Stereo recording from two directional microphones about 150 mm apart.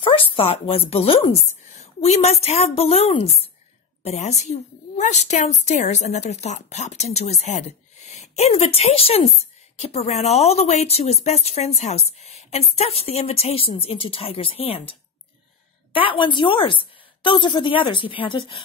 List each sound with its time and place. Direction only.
0.0 s a woman's voice: 35° left (ahead or behind)